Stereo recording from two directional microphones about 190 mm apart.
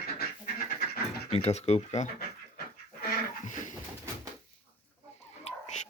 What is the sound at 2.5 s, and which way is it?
Dog, 55° left (ahead or behind).